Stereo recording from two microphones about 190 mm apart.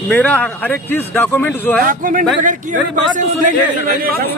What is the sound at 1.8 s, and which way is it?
Speech, 45° right (ahead or behind).